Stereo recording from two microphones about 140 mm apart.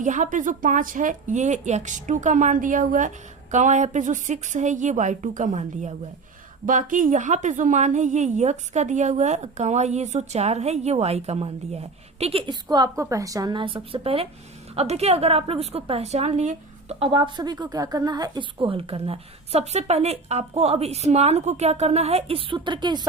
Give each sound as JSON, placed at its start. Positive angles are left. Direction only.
{"t": 0.0, "sound": "a woman's voice", "side_deg": -65}
{"t": 3.5, "sound": "a woman's voice", "side_deg": -60}
{"t": 5.5, "sound": "a woman's voice", "side_deg": -50}
{"t": 6.7, "sound": "a woman's voice", "side_deg": -70}
{"t": 12.7, "sound": "a woman's voice", "side_deg": -25}
{"t": 17.0, "sound": "a woman's voice", "side_deg": -35}